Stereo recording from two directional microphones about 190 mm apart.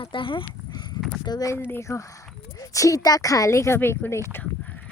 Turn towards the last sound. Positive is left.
turn(degrees=10)  # may be behind; listen again after turning